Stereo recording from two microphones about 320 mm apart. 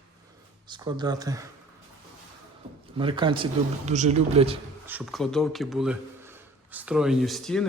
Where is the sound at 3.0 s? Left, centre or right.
Centre.